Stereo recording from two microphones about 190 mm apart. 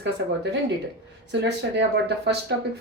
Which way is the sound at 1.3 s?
65° right (ahead or behind).